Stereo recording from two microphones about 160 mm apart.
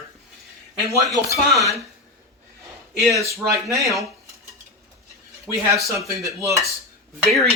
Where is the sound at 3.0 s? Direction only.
Centre (ahead or behind).